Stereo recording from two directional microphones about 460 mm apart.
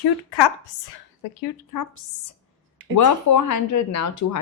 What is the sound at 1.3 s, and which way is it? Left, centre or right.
Speech, left.